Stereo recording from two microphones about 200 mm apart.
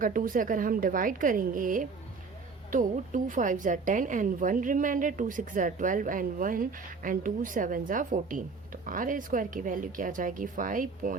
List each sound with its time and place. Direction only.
0.0 s a woman's voice: 45° right (ahead or behind)